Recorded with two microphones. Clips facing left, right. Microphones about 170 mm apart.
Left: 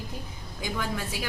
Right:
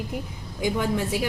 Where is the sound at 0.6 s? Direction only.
20° right (ahead or behind).